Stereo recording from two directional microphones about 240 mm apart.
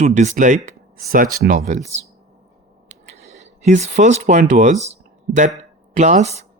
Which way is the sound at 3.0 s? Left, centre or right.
Right.